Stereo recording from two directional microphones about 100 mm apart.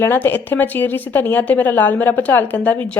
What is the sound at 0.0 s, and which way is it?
Speech, 20° left (ahead or behind).